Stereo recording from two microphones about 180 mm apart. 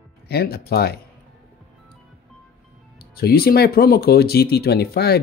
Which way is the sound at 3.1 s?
60° left (ahead or behind).